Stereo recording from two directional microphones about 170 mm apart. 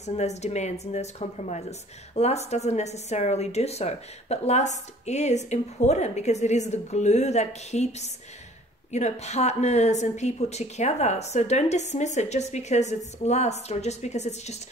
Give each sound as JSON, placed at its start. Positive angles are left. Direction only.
{"t": 0.0, "sound": "speech", "side_deg": 40}